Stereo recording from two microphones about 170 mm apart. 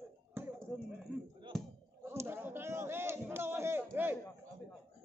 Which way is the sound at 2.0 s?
15° right (ahead or behind).